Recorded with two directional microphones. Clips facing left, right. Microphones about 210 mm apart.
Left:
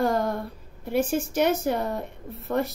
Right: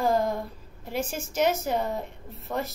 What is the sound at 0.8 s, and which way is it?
Speech, 60° left (ahead or behind).